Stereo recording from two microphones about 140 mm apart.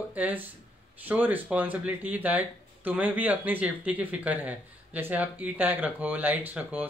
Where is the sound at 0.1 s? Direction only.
10° right (ahead or behind).